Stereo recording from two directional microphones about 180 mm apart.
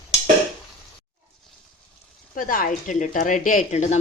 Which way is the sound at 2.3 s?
50° left (ahead or behind).